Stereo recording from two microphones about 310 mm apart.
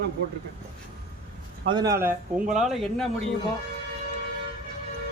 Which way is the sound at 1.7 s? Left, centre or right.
Centre.